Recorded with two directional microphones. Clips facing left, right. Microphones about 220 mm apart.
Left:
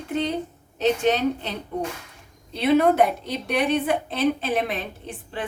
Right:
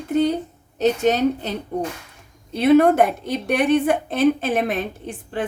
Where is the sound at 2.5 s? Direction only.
50° right (ahead or behind).